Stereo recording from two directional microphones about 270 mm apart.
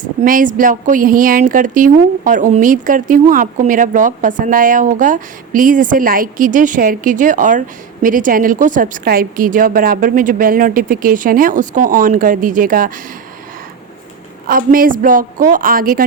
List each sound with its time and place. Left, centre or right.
0.0 s a woman's voice: right
14.4 s a woman's voice: right